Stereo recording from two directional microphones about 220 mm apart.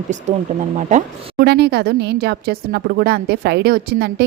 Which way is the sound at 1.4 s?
50° right (ahead or behind).